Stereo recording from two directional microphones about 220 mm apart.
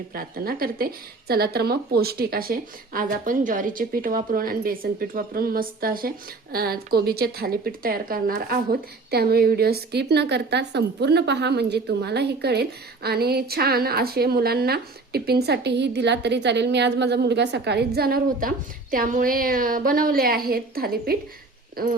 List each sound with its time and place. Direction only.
0.1 s speech: 40° right (ahead or behind)